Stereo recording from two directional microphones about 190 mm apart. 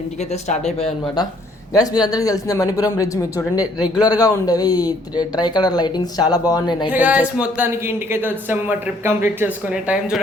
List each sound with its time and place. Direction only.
0.2 s speech: 35° left (ahead or behind)
1.0 s speech: 20° left (ahead or behind)
6.9 s speech: 10° right (ahead or behind)